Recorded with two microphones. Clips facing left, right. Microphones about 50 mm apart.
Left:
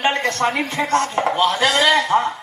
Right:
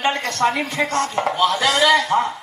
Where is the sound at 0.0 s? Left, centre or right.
Left.